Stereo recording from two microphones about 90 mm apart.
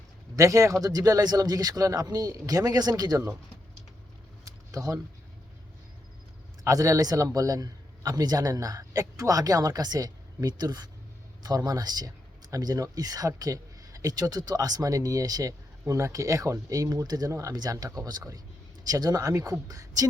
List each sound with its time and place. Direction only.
0.3 s speech: 35° right (ahead or behind)
4.4 s a sound: 40° right (ahead or behind)
6.7 s a man's voice: 40° right (ahead or behind)